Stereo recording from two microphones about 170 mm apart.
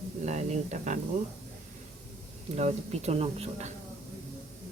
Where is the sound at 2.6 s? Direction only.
40° right (ahead or behind).